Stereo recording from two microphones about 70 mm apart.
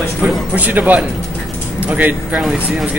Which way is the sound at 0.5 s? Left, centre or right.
Right.